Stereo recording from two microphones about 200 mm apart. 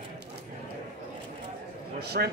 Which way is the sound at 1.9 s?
55° right (ahead or behind).